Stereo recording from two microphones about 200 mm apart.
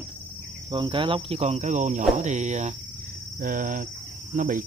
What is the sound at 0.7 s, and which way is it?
Speech, 25° right (ahead or behind).